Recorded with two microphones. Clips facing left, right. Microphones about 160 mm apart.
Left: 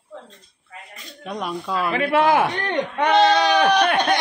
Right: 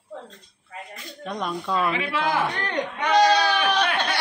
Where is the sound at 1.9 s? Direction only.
55° left (ahead or behind).